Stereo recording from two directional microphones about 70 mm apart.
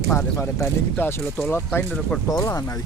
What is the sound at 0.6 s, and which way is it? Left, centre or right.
Speech, left.